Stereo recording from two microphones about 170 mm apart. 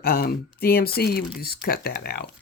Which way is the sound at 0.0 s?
60° left (ahead or behind).